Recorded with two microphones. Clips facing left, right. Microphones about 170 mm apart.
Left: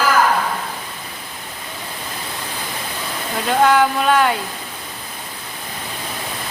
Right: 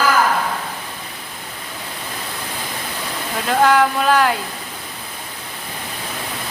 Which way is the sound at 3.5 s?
Centre (ahead or behind).